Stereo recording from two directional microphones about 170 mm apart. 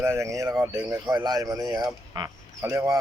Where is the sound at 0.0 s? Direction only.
15° right (ahead or behind).